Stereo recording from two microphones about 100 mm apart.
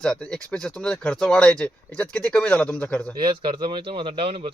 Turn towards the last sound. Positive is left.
turn(degrees=-70)  # may be behind; listen again after turning